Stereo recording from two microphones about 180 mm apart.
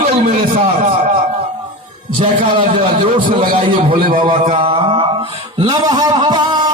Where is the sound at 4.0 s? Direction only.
50° right (ahead or behind).